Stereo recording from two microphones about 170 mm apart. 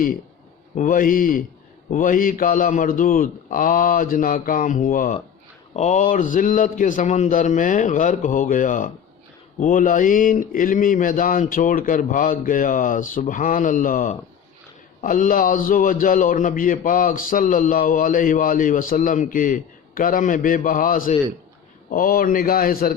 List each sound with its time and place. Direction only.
0.8 s a man's voice: 50° left (ahead or behind)